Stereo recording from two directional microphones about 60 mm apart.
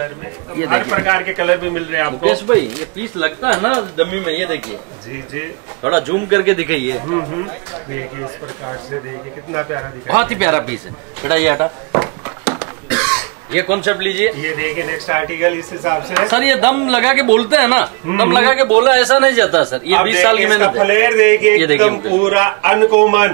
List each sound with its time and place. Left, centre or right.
0.6 s a man's voice: right
7.1 s a man's voice: right
11.5 s a man's voice: right